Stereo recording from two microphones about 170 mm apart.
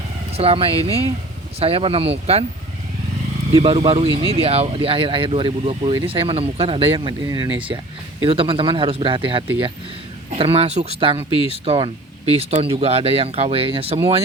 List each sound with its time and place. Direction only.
0.3 s speech: 35° right (ahead or behind)
3.5 s speech: 30° right (ahead or behind)
11.3 s speech: 35° left (ahead or behind)
11.6 s speech: 35° right (ahead or behind)